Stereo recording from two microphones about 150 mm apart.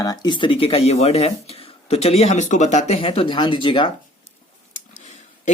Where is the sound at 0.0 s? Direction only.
25° left (ahead or behind).